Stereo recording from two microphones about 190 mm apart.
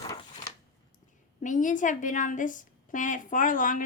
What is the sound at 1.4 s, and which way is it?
A woman's voice, 40° left (ahead or behind).